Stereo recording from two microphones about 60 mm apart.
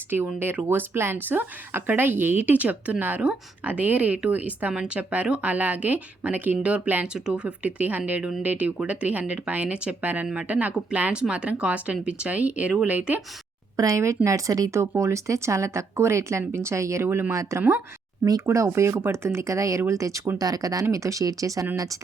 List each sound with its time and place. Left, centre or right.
0.3 s speech: right
13.7 s speech: right
14.7 s speech: right
17.3 s speech: right
17.6 s speech: right
18.4 s speech: right
20.4 s speech: right
20.9 s speech: right